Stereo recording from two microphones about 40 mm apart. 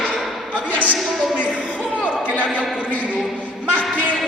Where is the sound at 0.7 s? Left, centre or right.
Left.